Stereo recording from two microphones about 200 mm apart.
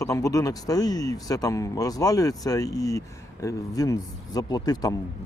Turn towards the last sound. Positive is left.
turn(degrees=20)  # may be behind; listen again after turning